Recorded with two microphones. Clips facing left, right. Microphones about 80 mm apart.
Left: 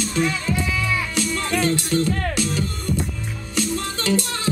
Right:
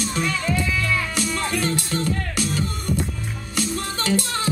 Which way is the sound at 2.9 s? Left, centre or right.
Centre.